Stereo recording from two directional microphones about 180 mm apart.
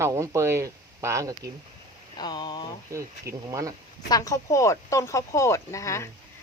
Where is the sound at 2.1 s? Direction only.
25° left (ahead or behind).